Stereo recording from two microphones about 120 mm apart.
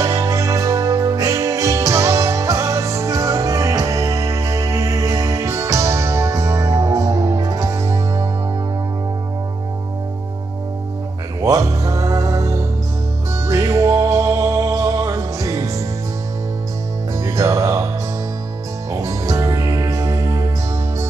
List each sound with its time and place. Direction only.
0.0 s music: 25° right (ahead or behind)
11.4 s music: 25° right (ahead or behind)
17.2 s music: 25° right (ahead or behind)
18.9 s music: 25° right (ahead or behind)